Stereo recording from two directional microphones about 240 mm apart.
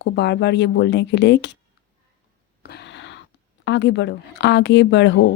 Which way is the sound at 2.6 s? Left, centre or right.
Left.